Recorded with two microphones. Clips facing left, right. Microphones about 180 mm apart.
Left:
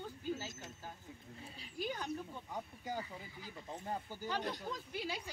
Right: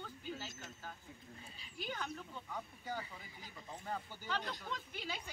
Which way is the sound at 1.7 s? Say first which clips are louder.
Left 3 dB; 35° left (ahead or behind).